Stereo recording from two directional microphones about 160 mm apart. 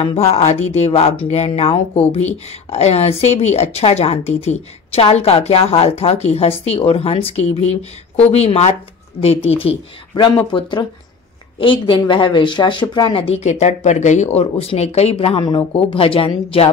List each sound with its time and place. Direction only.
0.0 s speech: 40° left (ahead or behind)